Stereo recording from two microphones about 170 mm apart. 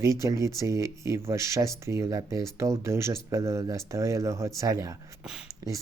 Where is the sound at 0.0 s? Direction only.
20° right (ahead or behind).